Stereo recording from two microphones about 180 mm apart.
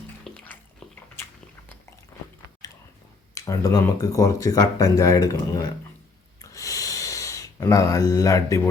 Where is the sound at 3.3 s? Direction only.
20° left (ahead or behind).